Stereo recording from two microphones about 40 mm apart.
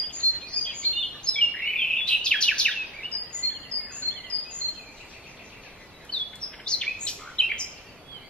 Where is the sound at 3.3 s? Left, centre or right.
Right.